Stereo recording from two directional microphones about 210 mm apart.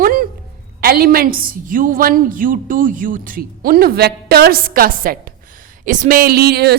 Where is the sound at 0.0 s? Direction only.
45° right (ahead or behind).